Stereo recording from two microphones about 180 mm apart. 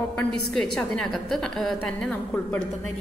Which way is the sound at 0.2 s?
5° left (ahead or behind).